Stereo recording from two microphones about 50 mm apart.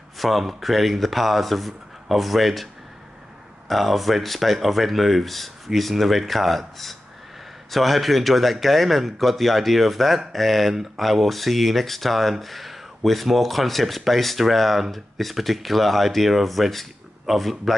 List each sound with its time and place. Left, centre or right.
0.2 s speech: centre